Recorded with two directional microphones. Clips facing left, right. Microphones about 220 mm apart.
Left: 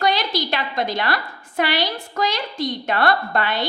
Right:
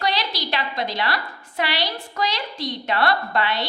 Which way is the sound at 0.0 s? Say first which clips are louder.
Left 4 dB; 50° left (ahead or behind).